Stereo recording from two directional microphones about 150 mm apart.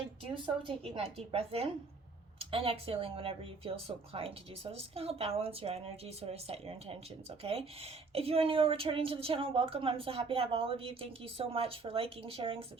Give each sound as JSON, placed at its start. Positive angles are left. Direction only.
{"t": 0.9, "sound": "speech", "side_deg": -40}